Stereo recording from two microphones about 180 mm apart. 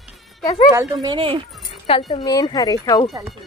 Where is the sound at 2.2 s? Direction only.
20° left (ahead or behind).